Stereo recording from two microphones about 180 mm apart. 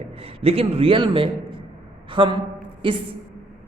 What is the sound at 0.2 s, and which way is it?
A man's voice, 30° right (ahead or behind).